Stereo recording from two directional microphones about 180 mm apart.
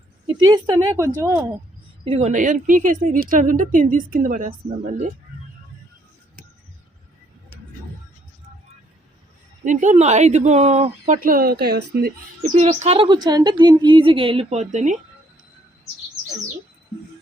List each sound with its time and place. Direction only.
0.4 s speech: 25° right (ahead or behind)
2.0 s a woman's voice: 40° right (ahead or behind)
9.6 s a woman's voice: 40° right (ahead or behind); by 12.1 s 60° right (ahead or behind)
12.4 s speech: 40° right (ahead or behind)